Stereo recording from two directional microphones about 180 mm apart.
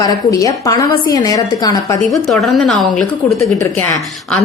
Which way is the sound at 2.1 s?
Centre (ahead or behind).